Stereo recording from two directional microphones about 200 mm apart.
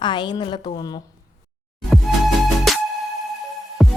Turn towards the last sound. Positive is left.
turn(degrees=0)  # may be behind; listen again after turning